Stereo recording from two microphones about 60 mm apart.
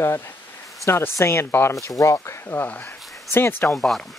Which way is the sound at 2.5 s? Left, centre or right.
Left.